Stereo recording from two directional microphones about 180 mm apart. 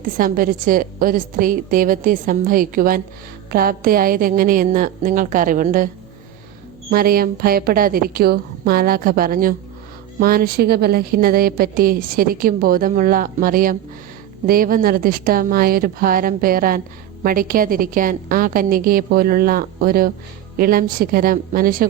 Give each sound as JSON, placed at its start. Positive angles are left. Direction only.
{"t": 0.2, "sound": "a woman's voice", "side_deg": -50}
{"t": 6.9, "sound": "a woman's voice", "side_deg": -55}